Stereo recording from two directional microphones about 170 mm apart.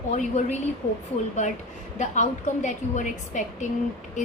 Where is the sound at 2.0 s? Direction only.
45° left (ahead or behind).